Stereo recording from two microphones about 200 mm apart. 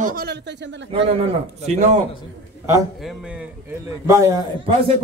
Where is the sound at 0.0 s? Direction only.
50° right (ahead or behind); by 0.8 s 65° right (ahead or behind).